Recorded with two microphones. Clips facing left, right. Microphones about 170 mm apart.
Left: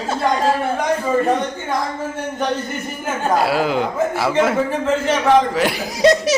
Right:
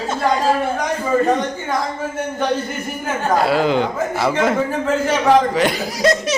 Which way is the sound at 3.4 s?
5° left (ahead or behind).